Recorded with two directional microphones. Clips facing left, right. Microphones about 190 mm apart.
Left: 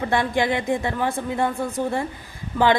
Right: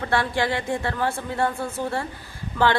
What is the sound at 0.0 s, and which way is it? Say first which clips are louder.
A woman's voice: left 2 dB; 15° left (ahead or behind).